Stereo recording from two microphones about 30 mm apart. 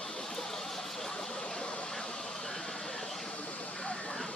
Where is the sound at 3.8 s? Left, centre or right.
Left.